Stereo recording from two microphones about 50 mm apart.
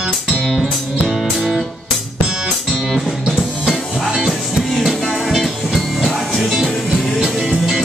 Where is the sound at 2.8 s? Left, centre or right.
Centre.